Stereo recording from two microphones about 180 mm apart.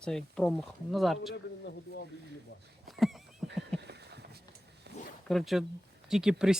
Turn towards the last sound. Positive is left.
turn(degrees=-5)  # may be behind; listen again after turning